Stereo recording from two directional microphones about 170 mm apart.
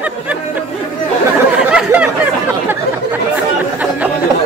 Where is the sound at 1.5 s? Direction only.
5° right (ahead or behind).